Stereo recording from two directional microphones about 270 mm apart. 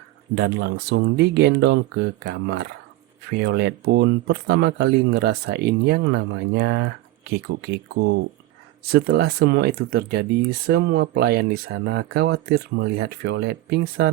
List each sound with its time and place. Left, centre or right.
0.3 s speech: right
8.9 s speech: right